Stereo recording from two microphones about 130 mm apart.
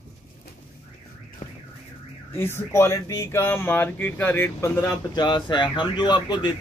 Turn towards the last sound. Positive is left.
turn(degrees=35)  # may be behind; listen again after turning